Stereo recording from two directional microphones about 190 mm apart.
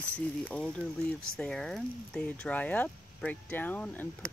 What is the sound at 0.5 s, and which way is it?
Speech, 5° left (ahead or behind).